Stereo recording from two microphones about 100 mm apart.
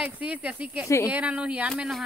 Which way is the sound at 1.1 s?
10° right (ahead or behind).